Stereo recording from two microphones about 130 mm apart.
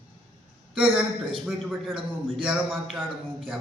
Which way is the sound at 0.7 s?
5° right (ahead or behind).